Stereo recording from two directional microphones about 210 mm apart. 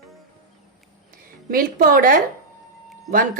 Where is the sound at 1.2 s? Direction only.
45° right (ahead or behind).